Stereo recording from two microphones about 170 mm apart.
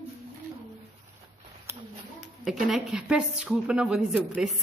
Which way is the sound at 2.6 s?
5° right (ahead or behind).